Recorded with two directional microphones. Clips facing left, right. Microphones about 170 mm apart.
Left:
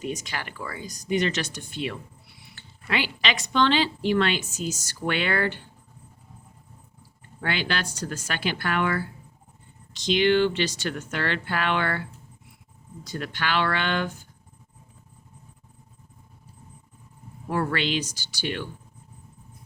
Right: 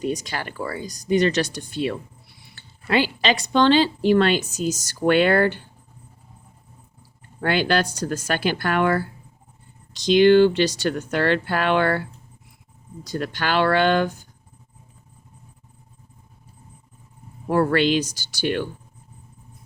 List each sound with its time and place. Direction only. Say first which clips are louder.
0.0 s speech: right 6 dB; 35° right (ahead or behind)
7.4 s speech: right 8 dB; 40° right (ahead or behind)
13.1 s speech: right 4 dB; 40° right (ahead or behind)
17.5 s speech: right 7 dB; 40° right (ahead or behind)